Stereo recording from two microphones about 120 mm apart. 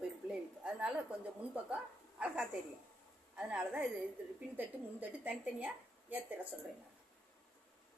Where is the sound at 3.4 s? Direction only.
5° right (ahead or behind).